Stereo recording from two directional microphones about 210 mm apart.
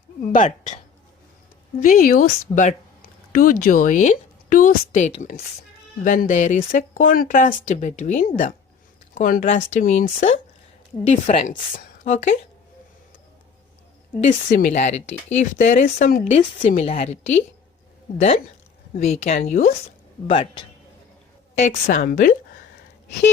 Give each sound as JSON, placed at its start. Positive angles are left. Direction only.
{"t": 0.3, "sound": "speech", "side_deg": 35}
{"t": 1.8, "sound": "speech", "side_deg": 40}
{"t": 14.2, "sound": "speech", "side_deg": 40}
{"t": 16.3, "sound": "speech", "side_deg": 30}
{"t": 19.0, "sound": "speech", "side_deg": 30}
{"t": 20.2, "sound": "speech", "side_deg": 25}
{"t": 21.6, "sound": "speech", "side_deg": 40}